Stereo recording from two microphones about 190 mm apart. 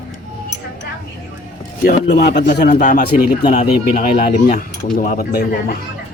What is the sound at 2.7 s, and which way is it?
A man's voice, 40° left (ahead or behind).